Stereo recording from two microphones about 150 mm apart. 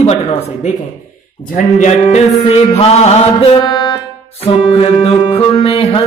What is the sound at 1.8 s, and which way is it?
Speech, 50° left (ahead or behind).